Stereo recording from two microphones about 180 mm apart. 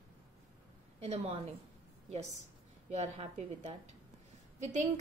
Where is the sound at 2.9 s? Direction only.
35° right (ahead or behind).